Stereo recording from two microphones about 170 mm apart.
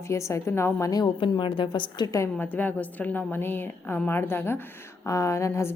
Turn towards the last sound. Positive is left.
turn(degrees=15)  # may be behind; listen again after turning